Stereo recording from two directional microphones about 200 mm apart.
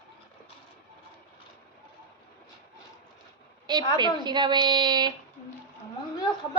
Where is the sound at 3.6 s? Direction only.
20° right (ahead or behind).